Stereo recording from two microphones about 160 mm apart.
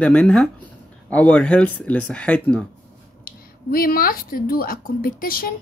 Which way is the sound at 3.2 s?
65° left (ahead or behind).